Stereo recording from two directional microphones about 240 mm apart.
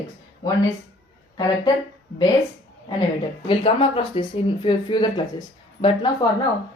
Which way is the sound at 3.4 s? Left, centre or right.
Left.